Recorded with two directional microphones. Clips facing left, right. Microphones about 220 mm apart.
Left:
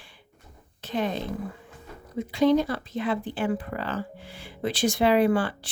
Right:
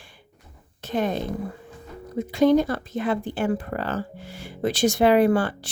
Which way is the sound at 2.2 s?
45° right (ahead or behind).